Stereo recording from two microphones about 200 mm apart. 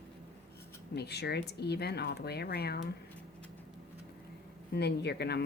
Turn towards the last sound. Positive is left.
turn(degrees=55)  # may be behind; listen again after turning